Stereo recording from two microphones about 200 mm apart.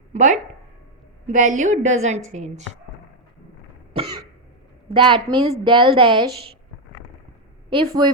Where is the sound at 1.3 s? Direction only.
40° right (ahead or behind).